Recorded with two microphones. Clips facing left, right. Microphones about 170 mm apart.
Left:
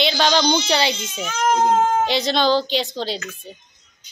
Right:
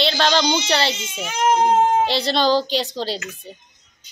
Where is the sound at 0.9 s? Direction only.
25° right (ahead or behind).